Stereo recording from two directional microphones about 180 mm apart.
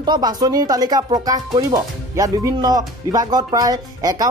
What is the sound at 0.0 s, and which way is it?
Speech, 20° right (ahead or behind).